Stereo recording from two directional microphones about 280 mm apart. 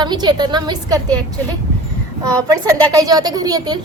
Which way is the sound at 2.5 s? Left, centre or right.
Centre.